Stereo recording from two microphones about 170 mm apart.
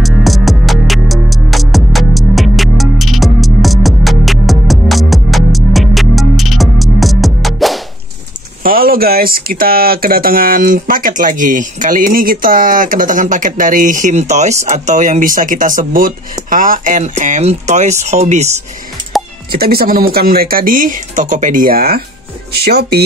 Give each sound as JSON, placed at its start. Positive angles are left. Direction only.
{"t": 0.0, "sound": "music", "side_deg": 0}
{"t": 8.6, "sound": "speech", "side_deg": -60}
{"t": 19.1, "sound": "a sound", "side_deg": 0}
{"t": 19.5, "sound": "speech", "side_deg": -65}